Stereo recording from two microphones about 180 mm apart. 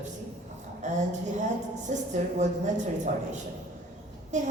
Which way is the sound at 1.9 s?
40° right (ahead or behind).